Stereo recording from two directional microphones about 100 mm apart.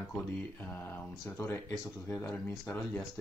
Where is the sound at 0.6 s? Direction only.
15° left (ahead or behind).